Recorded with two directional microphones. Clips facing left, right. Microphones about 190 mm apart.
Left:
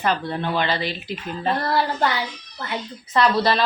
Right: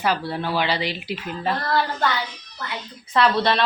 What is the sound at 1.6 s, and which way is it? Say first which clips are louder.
Speech: left 1 dB; 25° left (ahead or behind).